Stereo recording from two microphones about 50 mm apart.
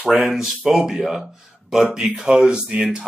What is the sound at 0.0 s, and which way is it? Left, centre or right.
Speech, centre.